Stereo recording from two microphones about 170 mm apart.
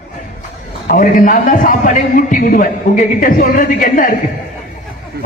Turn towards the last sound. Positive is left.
turn(degrees=50)  # may be behind; listen again after turning